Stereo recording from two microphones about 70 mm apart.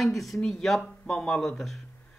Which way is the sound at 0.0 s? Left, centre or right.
Centre.